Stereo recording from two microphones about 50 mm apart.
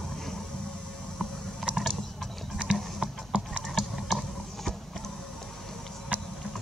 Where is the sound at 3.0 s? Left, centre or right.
Centre.